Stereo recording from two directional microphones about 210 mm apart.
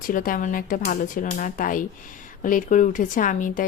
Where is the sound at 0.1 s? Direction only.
40° left (ahead or behind).